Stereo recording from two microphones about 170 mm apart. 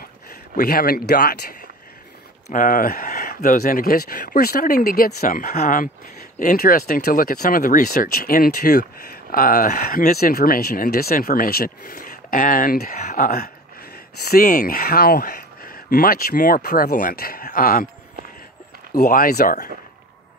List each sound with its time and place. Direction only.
0.6 s speech: 60° left (ahead or behind)
2.5 s speech: 55° left (ahead or behind)
18.9 s speech: 60° left (ahead or behind)